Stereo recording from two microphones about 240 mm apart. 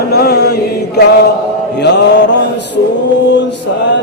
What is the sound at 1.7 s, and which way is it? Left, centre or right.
Mantra, left.